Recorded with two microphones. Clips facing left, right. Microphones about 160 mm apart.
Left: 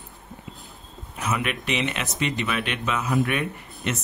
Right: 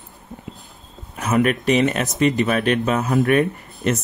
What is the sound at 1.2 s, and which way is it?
Speech, 45° right (ahead or behind).